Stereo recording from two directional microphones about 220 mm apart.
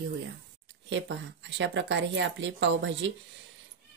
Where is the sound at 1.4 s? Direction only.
55° right (ahead or behind).